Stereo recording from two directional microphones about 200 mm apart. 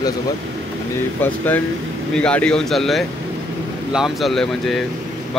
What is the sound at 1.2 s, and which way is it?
Speech, 10° left (ahead or behind).